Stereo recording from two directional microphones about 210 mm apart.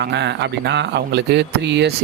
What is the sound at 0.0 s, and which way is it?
Speech, 55° right (ahead or behind).